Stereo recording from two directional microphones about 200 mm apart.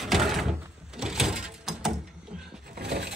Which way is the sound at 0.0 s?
Centre (ahead or behind).